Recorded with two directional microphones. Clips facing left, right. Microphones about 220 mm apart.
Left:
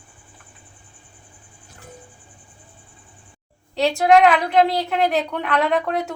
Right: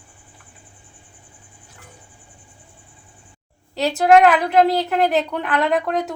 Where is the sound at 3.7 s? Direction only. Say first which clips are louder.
Right 1 dB; 5° right (ahead or behind).